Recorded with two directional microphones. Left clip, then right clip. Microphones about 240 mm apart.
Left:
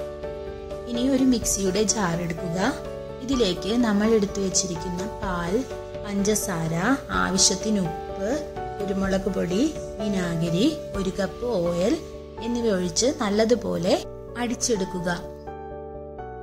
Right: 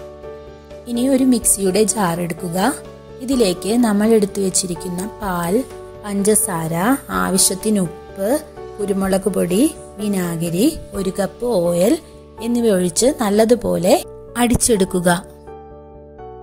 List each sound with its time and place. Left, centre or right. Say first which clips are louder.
0.8 s a woman's voice: right 6 dB; right